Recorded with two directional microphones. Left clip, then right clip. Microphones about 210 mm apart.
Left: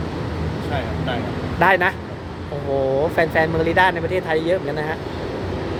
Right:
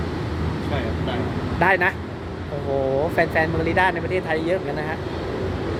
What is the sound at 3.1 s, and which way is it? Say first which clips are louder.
Speech: left 2 dB; 15° left (ahead or behind).